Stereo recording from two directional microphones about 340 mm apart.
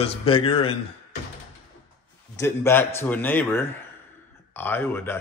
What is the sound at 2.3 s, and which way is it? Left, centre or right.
A man's voice, centre.